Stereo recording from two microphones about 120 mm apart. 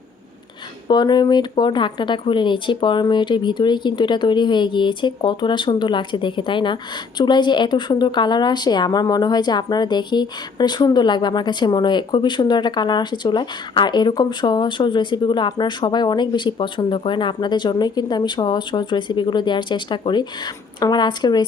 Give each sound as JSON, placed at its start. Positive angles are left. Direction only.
{"t": 0.9, "sound": "a woman's voice", "side_deg": 35}